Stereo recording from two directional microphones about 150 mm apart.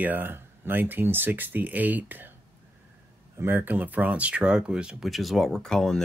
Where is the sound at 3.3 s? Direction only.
15° right (ahead or behind).